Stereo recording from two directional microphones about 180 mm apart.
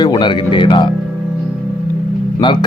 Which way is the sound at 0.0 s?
25° left (ahead or behind).